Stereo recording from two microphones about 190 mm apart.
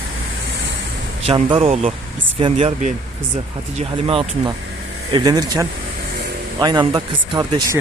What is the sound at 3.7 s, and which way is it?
Speech, 30° right (ahead or behind).